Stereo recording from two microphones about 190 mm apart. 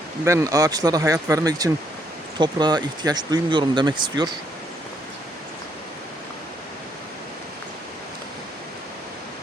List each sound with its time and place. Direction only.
0.3 s speech: 15° right (ahead or behind)